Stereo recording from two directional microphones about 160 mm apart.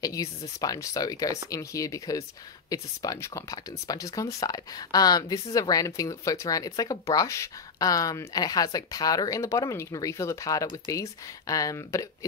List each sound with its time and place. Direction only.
0.0 s speech: 20° left (ahead or behind)